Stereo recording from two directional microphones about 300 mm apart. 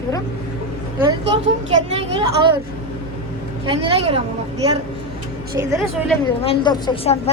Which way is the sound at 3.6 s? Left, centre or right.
Centre.